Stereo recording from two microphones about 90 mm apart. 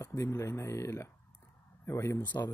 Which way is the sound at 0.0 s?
35° left (ahead or behind).